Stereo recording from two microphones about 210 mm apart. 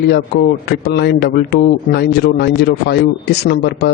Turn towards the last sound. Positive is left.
turn(degrees=50)  # may be behind; listen again after turning